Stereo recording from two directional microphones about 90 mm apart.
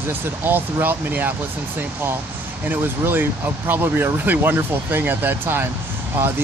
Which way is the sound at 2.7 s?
20° right (ahead or behind).